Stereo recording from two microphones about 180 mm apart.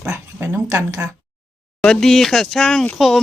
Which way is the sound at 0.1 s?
10° right (ahead or behind).